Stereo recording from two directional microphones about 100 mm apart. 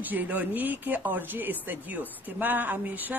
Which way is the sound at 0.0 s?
15° right (ahead or behind).